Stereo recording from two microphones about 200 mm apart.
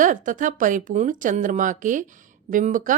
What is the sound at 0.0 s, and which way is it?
Speech, 40° right (ahead or behind).